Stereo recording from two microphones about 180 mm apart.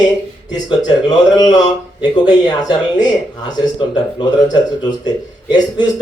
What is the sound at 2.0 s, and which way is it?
Speech, 25° left (ahead or behind).